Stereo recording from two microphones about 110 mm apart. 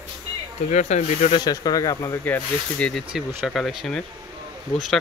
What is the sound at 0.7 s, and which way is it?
Speech, 90° left.